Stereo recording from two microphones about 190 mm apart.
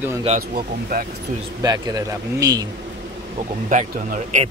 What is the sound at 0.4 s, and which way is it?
Speech, 50° right (ahead or behind).